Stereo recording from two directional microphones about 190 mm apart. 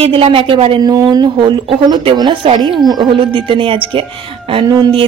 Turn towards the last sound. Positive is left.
turn(degrees=-25)  # may be behind; listen again after turning